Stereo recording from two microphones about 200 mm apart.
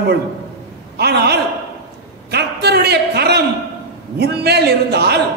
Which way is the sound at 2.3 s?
55° right (ahead or behind).